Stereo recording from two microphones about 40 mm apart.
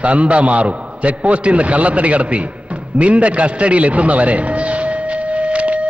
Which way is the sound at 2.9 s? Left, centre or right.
Right.